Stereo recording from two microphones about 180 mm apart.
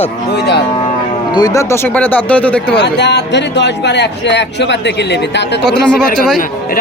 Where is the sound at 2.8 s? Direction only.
70° left (ahead or behind).